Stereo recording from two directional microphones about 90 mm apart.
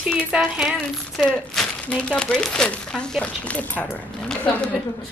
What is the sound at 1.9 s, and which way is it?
Speech, 15° left (ahead or behind).